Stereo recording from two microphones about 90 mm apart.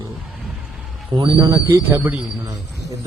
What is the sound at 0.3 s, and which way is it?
Vehicle, centre (ahead or behind).